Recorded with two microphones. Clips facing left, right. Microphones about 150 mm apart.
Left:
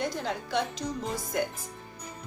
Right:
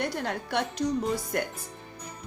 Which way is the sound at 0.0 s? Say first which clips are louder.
Right 1 dB; 60° right (ahead or behind).